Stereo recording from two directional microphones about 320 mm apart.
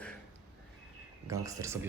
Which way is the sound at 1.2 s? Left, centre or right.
Centre.